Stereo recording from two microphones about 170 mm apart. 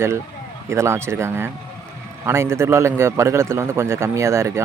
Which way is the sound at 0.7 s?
15° right (ahead or behind).